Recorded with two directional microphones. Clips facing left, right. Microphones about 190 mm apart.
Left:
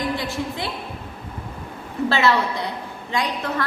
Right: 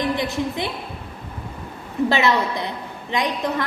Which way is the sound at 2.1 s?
20° right (ahead or behind).